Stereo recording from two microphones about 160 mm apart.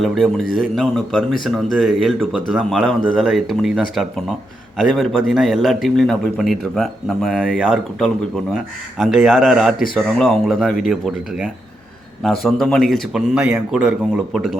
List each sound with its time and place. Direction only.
0.0 s a man's voice: centre (ahead or behind)